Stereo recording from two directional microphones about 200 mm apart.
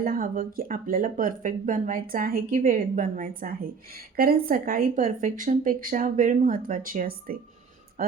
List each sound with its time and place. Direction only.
0.0 s speech: 45° right (ahead or behind)